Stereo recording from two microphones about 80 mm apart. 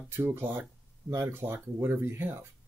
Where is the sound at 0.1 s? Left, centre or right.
Right.